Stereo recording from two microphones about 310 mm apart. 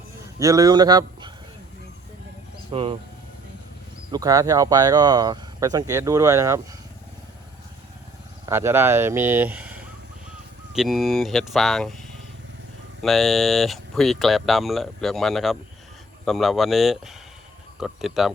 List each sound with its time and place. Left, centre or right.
0.3 s speech: centre
2.7 s speech: centre
4.1 s speech: centre
8.4 s speech: centre